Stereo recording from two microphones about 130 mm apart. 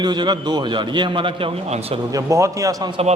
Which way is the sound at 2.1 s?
25° right (ahead or behind).